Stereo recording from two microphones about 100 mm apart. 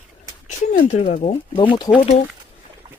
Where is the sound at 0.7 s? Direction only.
70° left (ahead or behind).